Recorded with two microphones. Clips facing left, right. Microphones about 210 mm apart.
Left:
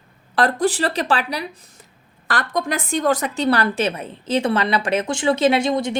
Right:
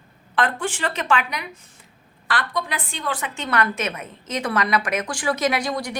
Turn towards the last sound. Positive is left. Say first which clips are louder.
# left 6 dB
turn(degrees=25)  # may be behind; listen again after turning